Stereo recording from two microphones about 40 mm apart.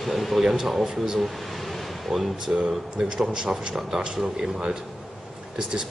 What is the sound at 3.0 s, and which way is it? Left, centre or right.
Speech, centre.